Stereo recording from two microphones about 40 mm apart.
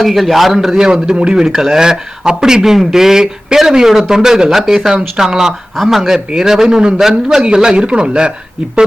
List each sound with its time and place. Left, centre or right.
0.0 s speech: centre
5.7 s speech: centre
6.3 s speech: centre